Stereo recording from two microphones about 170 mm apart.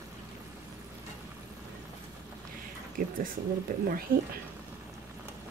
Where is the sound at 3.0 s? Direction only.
55° right (ahead or behind).